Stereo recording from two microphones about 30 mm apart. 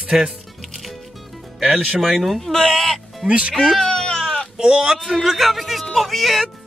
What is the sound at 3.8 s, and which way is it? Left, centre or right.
Baby cry, left.